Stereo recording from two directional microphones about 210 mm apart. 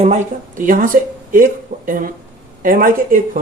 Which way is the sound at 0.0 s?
35° right (ahead or behind).